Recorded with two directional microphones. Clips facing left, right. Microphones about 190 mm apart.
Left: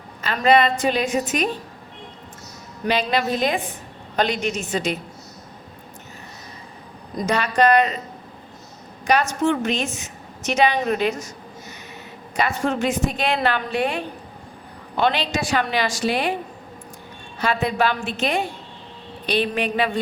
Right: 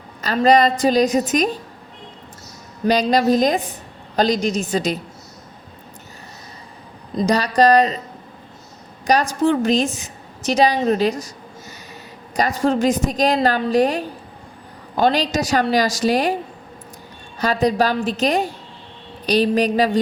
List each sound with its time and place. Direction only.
0.2 s a woman's voice: 40° right (ahead or behind)
2.8 s a woman's voice: 40° right (ahead or behind)
7.2 s a woman's voice: 35° right (ahead or behind)
9.0 s a woman's voice: 35° right (ahead or behind)
12.4 s a woman's voice: 35° right (ahead or behind)
17.4 s a woman's voice: 40° right (ahead or behind)